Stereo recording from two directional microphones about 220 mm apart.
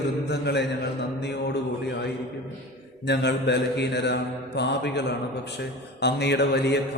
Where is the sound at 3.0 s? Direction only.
50° left (ahead or behind).